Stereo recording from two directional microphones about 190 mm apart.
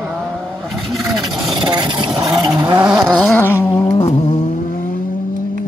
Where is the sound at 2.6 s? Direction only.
20° right (ahead or behind).